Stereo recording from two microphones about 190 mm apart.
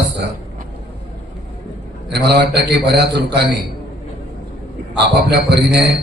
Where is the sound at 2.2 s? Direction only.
60° right (ahead or behind).